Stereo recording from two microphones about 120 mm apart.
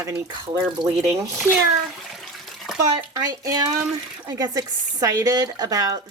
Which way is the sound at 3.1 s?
30° right (ahead or behind).